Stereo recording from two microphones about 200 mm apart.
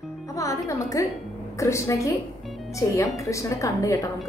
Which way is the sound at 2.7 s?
15° left (ahead or behind).